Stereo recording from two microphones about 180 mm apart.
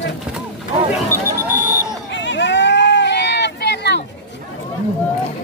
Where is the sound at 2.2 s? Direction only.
80° left.